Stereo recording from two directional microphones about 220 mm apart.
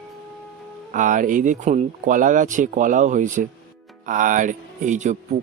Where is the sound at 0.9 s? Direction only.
35° right (ahead or behind).